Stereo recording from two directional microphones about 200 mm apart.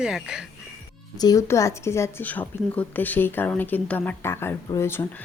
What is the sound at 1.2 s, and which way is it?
A woman's voice, 20° left (ahead or behind).